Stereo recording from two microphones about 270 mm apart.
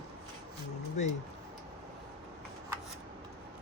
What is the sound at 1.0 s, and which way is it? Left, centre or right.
Speech, left.